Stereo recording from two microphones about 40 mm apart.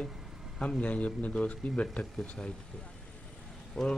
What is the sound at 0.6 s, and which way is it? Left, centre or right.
A man's voice, left.